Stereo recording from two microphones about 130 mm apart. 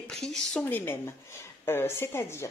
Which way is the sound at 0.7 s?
15° left (ahead or behind).